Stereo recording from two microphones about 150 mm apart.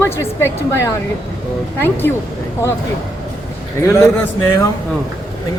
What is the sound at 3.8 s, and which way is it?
Speech, 15° left (ahead or behind).